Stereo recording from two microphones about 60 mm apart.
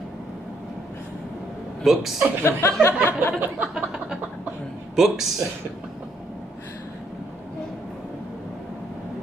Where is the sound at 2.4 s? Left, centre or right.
Left.